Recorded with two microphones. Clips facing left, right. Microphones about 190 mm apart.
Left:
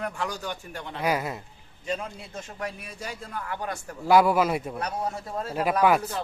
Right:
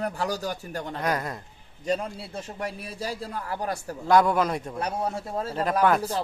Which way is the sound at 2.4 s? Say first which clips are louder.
Right 1 dB; 30° right (ahead or behind).